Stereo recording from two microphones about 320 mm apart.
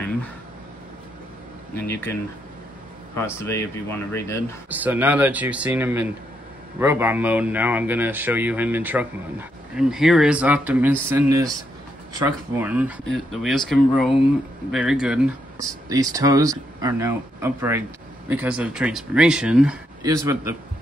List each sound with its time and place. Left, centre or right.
1.9 s speech: centre
3.3 s speech: centre
4.6 s speech: centre